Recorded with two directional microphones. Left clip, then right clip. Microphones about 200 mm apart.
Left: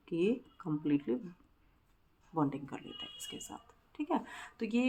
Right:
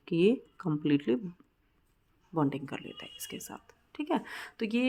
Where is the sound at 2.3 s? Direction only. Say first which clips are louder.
Right 4 dB; 45° right (ahead or behind).